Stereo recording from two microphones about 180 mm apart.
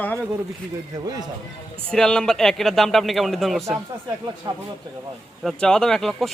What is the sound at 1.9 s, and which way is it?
A man's voice, 5° left (ahead or behind).